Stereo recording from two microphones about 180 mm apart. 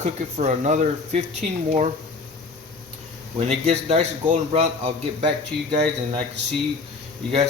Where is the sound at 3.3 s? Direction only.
35° right (ahead or behind).